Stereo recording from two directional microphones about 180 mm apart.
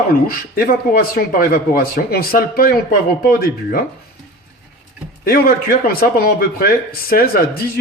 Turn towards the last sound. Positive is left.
turn(degrees=55)  # may be behind; listen again after turning